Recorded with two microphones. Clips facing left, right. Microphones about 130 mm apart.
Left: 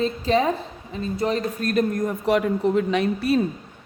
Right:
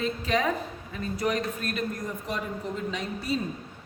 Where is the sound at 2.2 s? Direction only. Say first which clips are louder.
Left 15 dB; 75° left (ahead or behind).